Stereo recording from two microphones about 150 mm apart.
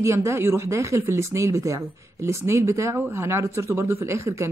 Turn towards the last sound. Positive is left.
turn(degrees=-20)  # may be behind; listen again after turning